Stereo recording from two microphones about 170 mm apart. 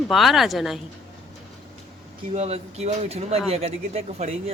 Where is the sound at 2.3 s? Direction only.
40° right (ahead or behind).